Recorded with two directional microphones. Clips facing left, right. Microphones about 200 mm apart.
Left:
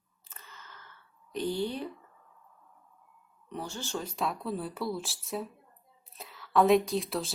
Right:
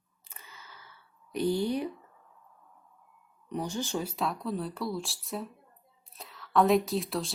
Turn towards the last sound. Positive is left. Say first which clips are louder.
# even
turn(degrees=0)  # may be behind; listen again after turning